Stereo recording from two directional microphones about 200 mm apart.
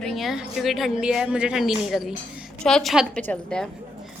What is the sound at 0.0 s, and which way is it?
A woman's voice, centre (ahead or behind).